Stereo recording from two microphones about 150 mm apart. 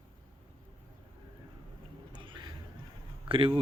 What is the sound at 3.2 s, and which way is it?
Speech, 35° right (ahead or behind).